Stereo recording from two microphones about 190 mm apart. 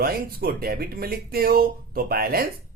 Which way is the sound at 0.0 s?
50° right (ahead or behind).